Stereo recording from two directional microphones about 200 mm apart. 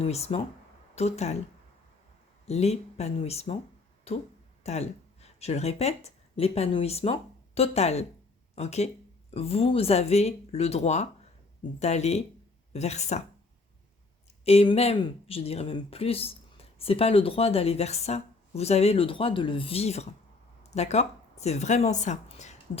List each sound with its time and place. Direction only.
0.0 s speech: 30° left (ahead or behind)
2.5 s speech: 30° left (ahead or behind)
14.4 s a woman's voice: 30° left (ahead or behind)